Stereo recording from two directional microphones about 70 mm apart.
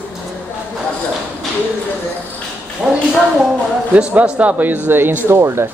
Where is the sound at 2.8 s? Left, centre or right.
Centre.